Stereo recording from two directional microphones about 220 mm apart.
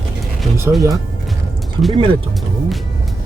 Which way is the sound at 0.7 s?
15° right (ahead or behind).